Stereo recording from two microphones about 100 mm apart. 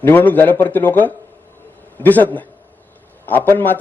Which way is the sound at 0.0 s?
20° left (ahead or behind).